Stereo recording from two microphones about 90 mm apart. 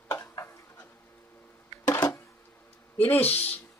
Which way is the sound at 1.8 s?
45° left (ahead or behind).